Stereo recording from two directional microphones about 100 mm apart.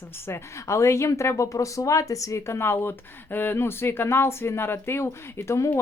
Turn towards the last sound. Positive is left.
turn(degrees=30)  # may be behind; listen again after turning